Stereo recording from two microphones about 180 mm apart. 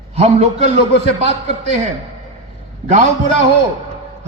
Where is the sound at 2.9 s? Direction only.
40° right (ahead or behind).